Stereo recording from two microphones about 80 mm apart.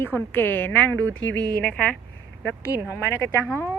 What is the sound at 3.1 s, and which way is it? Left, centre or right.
Speech, left.